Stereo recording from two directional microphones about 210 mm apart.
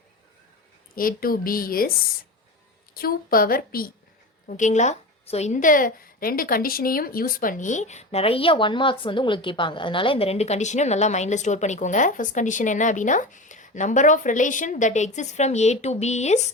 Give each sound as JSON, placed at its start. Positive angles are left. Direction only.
{"t": 0.9, "sound": "a woman's voice", "side_deg": 45}
{"t": 2.9, "sound": "a woman's voice", "side_deg": 45}